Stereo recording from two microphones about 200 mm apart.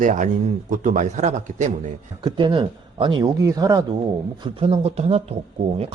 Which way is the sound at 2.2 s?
25° right (ahead or behind).